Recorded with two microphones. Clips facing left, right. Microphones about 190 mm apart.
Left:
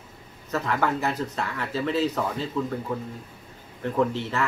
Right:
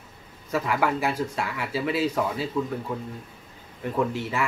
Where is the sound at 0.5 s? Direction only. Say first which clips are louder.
Right 1 dB; 10° right (ahead or behind).